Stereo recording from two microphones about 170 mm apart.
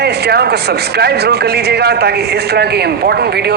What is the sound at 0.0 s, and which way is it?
Speech, 75° right (ahead or behind).